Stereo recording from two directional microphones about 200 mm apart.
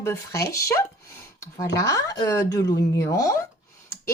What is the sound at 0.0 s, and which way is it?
Speech, 15° left (ahead or behind).